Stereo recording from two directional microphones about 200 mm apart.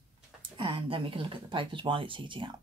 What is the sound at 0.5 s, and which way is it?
Speech, 25° right (ahead or behind).